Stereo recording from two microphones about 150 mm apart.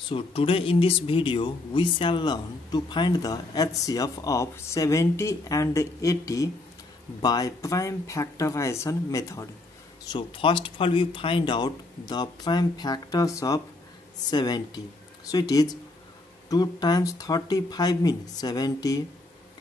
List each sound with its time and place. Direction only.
0.1 s speech: 35° left (ahead or behind); by 9.5 s 20° left (ahead or behind)
10.0 s speech: 35° left (ahead or behind)